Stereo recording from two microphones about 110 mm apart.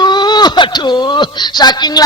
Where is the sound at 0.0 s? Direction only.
40° left (ahead or behind).